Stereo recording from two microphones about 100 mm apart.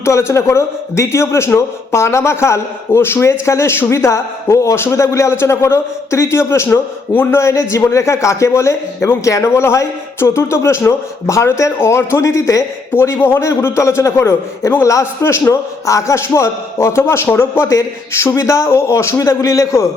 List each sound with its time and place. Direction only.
0.0 s a man's voice: 25° left (ahead or behind)